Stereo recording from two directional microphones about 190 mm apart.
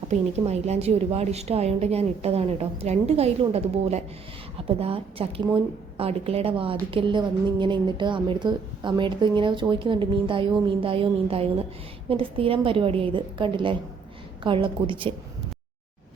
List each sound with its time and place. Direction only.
0.1 s a woman's voice: 35° right (ahead or behind)